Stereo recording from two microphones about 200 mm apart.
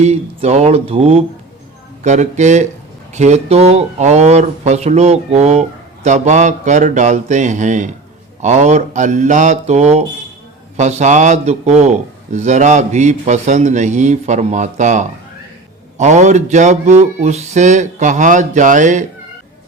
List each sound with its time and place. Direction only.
0.0 s speech: 35° right (ahead or behind)